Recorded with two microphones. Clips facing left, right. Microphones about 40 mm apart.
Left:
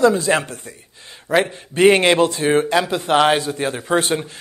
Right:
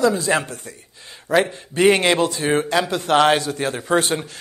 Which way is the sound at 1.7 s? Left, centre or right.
Left.